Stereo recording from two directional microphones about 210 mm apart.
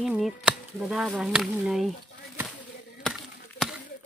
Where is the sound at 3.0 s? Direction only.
Centre (ahead or behind).